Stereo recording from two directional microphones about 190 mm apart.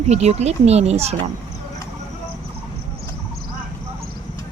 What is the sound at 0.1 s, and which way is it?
Speech, 35° right (ahead or behind).